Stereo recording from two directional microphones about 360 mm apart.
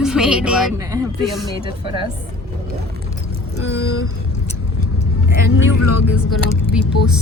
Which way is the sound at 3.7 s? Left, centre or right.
Left.